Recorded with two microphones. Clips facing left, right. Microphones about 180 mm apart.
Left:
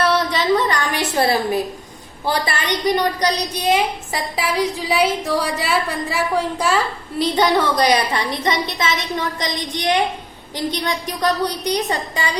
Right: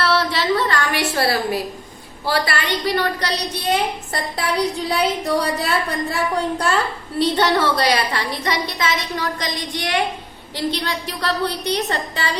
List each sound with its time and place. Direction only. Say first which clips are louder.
0.0 s a woman's voice: left 2 dB; 20° left (ahead or behind)